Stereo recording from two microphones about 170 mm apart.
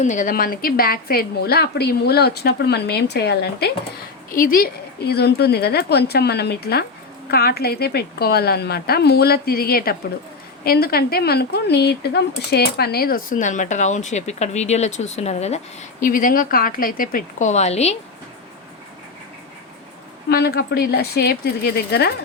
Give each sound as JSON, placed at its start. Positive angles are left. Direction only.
{"t": 0.0, "sound": "a woman's voice", "side_deg": 50}
{"t": 4.3, "sound": "a woman's voice", "side_deg": 55}
{"t": 16.0, "sound": "speech", "side_deg": 55}
{"t": 20.3, "sound": "a woman's voice", "side_deg": 65}